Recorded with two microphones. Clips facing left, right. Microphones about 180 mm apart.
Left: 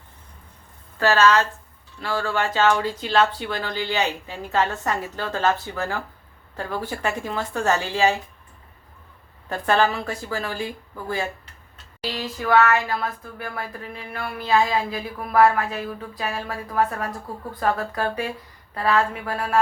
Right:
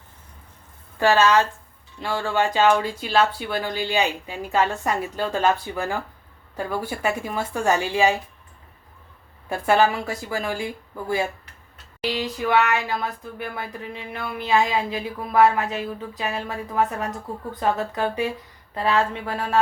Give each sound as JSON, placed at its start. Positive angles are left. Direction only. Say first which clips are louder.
{"t": 0.9, "sound": "speech", "louder": "right 1 dB", "side_deg": -15}
{"t": 9.5, "sound": "speech", "louder": "right 2 dB", "side_deg": -10}
{"t": 12.0, "sound": "a sound", "louder": "right 1 dB", "side_deg": -20}